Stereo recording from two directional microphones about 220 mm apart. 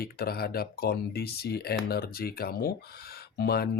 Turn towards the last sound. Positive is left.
turn(degrees=45)  # may be behind; listen again after turning